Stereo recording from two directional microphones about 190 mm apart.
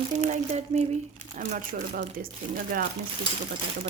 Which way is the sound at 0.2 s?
40° right (ahead or behind).